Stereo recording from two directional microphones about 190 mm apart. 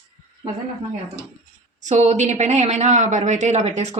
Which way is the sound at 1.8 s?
40° right (ahead or behind).